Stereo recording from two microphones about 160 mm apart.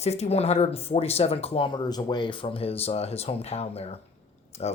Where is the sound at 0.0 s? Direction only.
40° left (ahead or behind).